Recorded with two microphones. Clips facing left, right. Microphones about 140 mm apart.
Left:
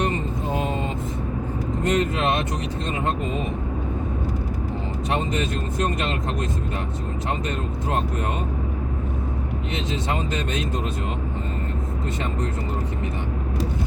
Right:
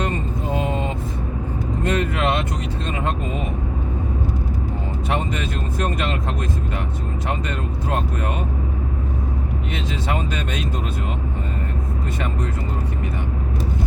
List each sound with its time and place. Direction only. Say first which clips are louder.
1.9 s vehicle: left 1 dB; 20° left (ahead or behind)